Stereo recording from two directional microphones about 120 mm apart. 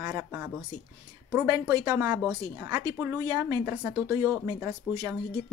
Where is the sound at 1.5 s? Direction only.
35° right (ahead or behind).